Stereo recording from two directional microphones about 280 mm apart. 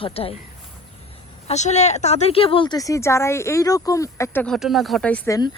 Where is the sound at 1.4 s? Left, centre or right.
Left.